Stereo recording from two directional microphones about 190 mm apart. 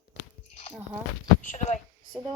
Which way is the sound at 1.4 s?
40° left (ahead or behind).